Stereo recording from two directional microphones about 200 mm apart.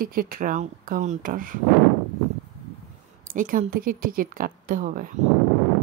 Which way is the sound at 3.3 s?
45° right (ahead or behind).